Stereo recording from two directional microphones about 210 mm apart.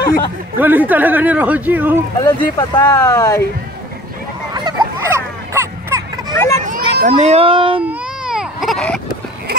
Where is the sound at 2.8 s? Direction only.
15° left (ahead or behind).